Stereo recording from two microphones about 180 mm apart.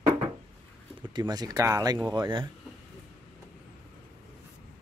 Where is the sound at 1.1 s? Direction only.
20° right (ahead or behind).